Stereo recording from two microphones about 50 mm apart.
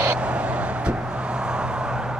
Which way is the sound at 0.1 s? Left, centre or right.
Right.